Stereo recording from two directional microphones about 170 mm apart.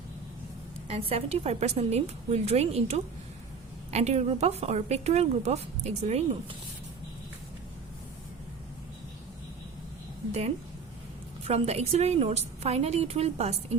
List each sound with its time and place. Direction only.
0.9 s a woman's voice: 35° right (ahead or behind)
11.4 s a woman's voice: 40° right (ahead or behind)